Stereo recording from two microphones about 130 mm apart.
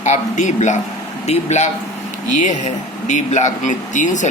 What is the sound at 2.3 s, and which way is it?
Speech, 70° left (ahead or behind).